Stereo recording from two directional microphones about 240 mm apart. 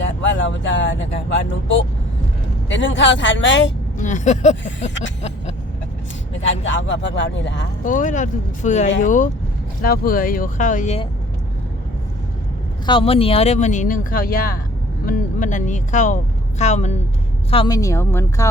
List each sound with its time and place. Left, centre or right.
0.0 s speech: left
2.6 s speech: left
3.9 s speech: left
6.4 s speech: left
7.9 s speech: left
12.8 s speech: left
17.5 s a woman's voice: centre